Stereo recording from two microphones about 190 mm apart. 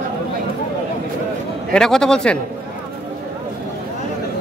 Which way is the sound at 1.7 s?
5° left (ahead or behind).